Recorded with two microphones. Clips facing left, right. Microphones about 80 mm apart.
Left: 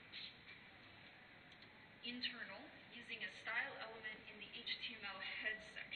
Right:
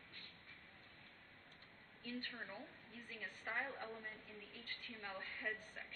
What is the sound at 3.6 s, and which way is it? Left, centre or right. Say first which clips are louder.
Speech: right 3 dB; centre.